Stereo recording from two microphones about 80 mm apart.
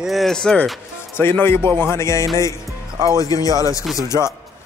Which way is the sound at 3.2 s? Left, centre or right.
Left.